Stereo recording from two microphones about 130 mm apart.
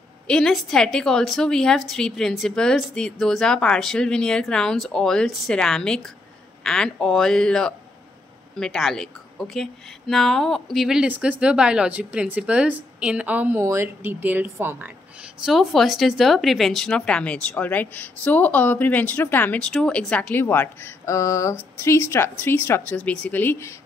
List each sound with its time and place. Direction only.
0.3 s a woman's voice: 5° left (ahead or behind); by 14.9 s 15° right (ahead or behind)
15.4 s speech: centre (ahead or behind); by 23.7 s 15° left (ahead or behind)